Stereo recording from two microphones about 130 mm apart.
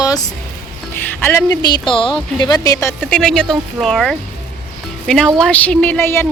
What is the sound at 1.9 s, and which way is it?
Speech, 40° left (ahead or behind).